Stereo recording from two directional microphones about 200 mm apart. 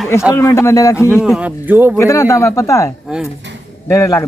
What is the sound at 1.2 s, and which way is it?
Speech, 5° right (ahead or behind).